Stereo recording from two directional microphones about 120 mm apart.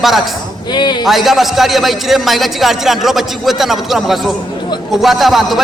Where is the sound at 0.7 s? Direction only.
40° left (ahead or behind).